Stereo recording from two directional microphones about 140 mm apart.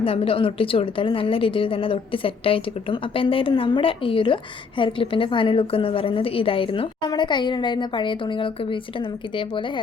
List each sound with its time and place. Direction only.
0.0 s a woman's voice: 40° left (ahead or behind)